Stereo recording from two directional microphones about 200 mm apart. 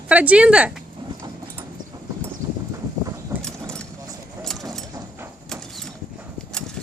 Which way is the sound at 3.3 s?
15° right (ahead or behind).